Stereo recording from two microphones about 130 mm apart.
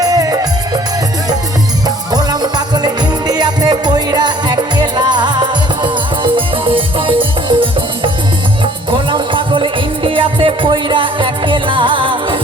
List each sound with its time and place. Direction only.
0.0 s music: 30° right (ahead or behind)
2.1 s music: 30° right (ahead or behind)